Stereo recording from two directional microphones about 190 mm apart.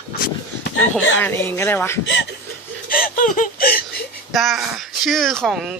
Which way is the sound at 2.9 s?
45° left (ahead or behind).